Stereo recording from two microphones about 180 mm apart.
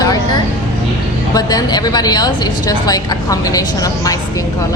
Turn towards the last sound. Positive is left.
turn(degrees=20)  # may be behind; listen again after turning